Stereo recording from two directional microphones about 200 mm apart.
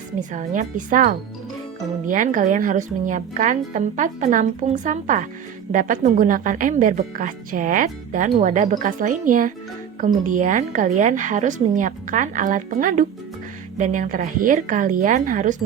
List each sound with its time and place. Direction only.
0.2 s speech: 40° right (ahead or behind)